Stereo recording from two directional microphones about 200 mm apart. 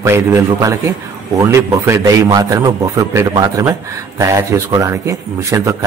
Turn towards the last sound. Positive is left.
turn(degrees=-15)  # may be behind; listen again after turning